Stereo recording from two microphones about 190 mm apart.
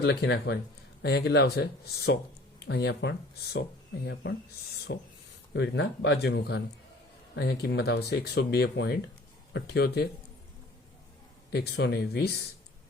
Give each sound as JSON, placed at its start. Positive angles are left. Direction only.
{"t": 0.0, "sound": "speech", "side_deg": 60}
{"t": 11.5, "sound": "speech", "side_deg": 60}